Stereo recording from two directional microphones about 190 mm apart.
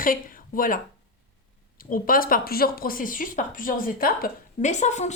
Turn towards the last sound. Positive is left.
turn(degrees=40)  # may be behind; listen again after turning